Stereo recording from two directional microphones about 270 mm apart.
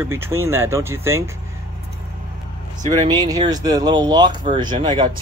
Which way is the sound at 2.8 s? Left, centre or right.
Centre.